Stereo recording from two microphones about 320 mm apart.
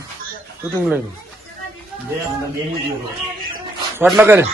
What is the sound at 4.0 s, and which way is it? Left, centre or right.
Speech, centre.